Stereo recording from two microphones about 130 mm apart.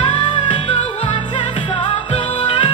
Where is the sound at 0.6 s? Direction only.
45° left (ahead or behind).